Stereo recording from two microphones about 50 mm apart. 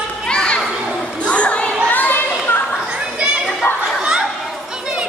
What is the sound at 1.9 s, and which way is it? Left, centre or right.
Children playing, left.